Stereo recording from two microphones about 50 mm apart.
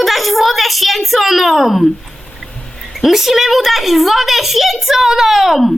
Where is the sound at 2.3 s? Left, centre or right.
Centre.